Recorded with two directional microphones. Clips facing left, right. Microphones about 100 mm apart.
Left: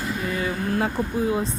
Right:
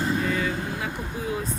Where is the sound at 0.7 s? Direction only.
40° left (ahead or behind).